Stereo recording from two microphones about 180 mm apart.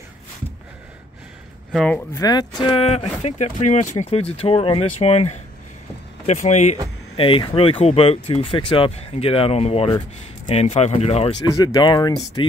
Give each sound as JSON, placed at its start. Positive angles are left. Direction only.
{"t": 1.7, "sound": "speech", "side_deg": 0}
{"t": 2.1, "sound": "speech", "side_deg": 20}
{"t": 7.2, "sound": "speech", "side_deg": 30}
{"t": 11.4, "sound": "speech", "side_deg": 20}